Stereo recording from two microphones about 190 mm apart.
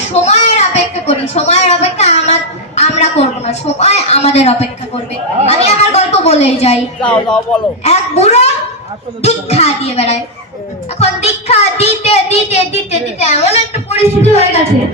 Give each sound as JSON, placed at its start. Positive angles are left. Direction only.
{"t": 0.1, "sound": "a sound", "side_deg": 35}
{"t": 7.0, "sound": "speech", "side_deg": 5}
{"t": 7.8, "sound": "speech", "side_deg": 35}